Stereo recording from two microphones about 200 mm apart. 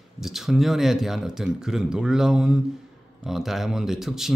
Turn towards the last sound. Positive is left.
turn(degrees=0)  # may be behind; listen again after turning